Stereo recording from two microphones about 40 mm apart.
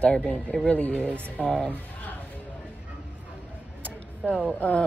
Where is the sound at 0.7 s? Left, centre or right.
Left.